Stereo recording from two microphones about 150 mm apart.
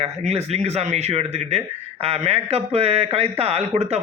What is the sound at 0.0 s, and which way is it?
Speech, 45° right (ahead or behind).